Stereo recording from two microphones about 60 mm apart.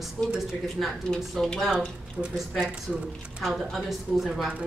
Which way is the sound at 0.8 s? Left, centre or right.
Centre.